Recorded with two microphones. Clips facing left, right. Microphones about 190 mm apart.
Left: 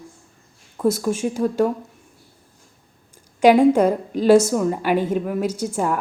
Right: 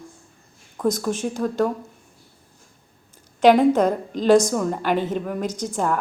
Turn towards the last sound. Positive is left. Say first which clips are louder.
# left 1 dB
turn(degrees=10)  # may be behind; listen again after turning